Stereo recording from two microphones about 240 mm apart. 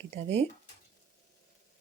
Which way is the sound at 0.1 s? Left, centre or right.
Right.